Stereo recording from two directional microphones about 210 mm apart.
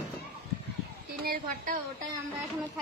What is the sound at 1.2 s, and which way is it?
Speech, 40° right (ahead or behind).